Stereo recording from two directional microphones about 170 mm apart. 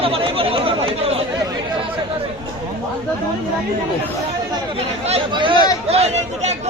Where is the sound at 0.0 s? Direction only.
35° right (ahead or behind).